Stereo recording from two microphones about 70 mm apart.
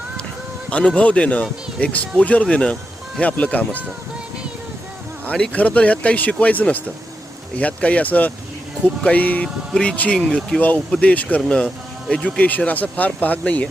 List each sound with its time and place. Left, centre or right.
0.7 s speech: centre
5.2 s speech: centre